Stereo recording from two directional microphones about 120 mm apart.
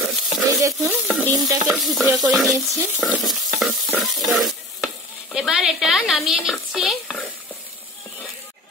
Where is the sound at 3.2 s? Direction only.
Centre (ahead or behind).